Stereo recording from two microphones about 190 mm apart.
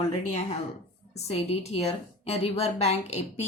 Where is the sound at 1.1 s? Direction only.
35° left (ahead or behind).